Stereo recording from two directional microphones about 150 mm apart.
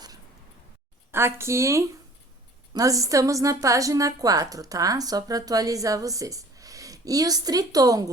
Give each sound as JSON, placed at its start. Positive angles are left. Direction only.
{"t": 1.1, "sound": "a woman's voice", "side_deg": -15}